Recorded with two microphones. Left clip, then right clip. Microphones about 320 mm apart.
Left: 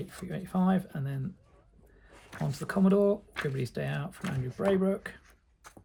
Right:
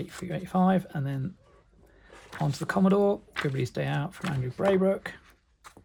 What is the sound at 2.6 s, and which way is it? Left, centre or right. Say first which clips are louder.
Speech: right 2 dB; centre.